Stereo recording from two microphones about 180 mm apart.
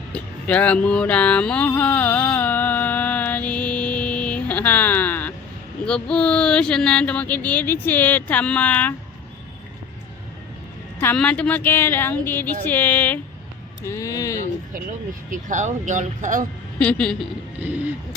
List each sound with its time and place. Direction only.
0.1 s music: 10° left (ahead or behind)
5.8 s speech: 5° left (ahead or behind)
11.0 s speech: 10° left (ahead or behind)
15.3 s speech: 45° right (ahead or behind)
16.7 s speech: 5° left (ahead or behind)